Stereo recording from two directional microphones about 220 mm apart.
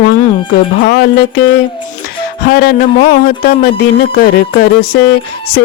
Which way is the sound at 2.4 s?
45° left (ahead or behind).